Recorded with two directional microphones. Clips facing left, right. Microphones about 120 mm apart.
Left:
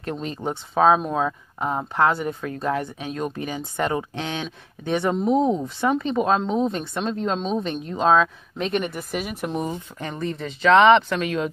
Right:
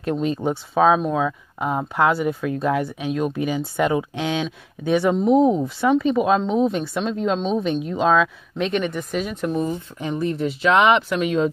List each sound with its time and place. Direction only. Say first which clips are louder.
0.0 s speech: right 6 dB; 15° right (ahead or behind); by 1.3 s centre (ahead or behind)
1.6 s speech: right 1 dB; 10° right (ahead or behind); by 9.5 s 5° left (ahead or behind)
9.9 s speech: right 5 dB; 10° right (ahead or behind)
11.2 s speech: right 5 dB; 25° right (ahead or behind)